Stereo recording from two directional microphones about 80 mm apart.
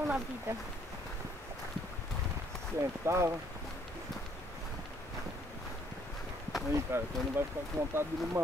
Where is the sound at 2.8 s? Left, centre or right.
Right.